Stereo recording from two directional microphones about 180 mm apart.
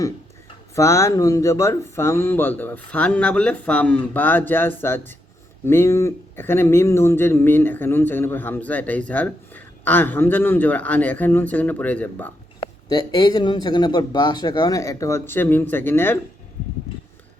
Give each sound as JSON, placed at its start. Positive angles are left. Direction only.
{"t": 0.8, "sound": "speech", "side_deg": 15}
{"t": 12.9, "sound": "a man's voice", "side_deg": 20}